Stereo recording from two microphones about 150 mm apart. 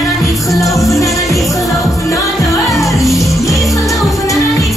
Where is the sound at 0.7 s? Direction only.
Centre (ahead or behind).